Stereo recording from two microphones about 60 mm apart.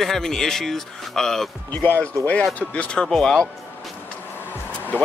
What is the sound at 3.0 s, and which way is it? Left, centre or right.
Speech, centre.